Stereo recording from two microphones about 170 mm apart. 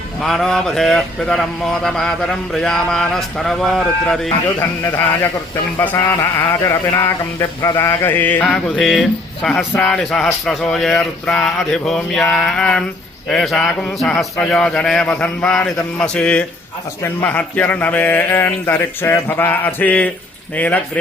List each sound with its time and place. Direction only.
0.2 s speech: centre (ahead or behind)
5.8 s speech: 10° left (ahead or behind)